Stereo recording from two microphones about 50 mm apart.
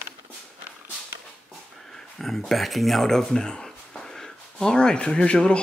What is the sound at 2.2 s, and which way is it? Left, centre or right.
Speech, centre.